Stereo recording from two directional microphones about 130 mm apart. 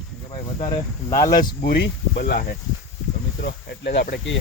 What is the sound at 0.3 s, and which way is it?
Speech, 50° left (ahead or behind).